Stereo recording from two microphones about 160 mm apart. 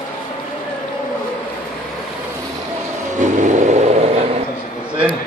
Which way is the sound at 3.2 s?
50° right (ahead or behind).